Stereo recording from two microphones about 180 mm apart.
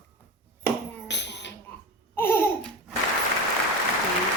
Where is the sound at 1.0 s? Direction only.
75° left (ahead or behind).